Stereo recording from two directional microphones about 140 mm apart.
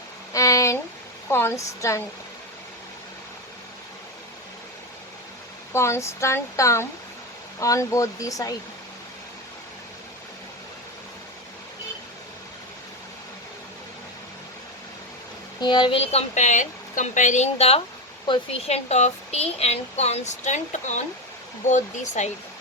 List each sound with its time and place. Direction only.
0.3 s a sound: 25° left (ahead or behind)
1.3 s speech: 15° left (ahead or behind)
5.7 s speech: 20° left (ahead or behind)
15.6 s a woman's voice: 30° left (ahead or behind); by 22.3 s 60° left (ahead or behind)